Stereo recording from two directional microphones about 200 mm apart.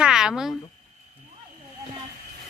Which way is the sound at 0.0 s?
5° right (ahead or behind).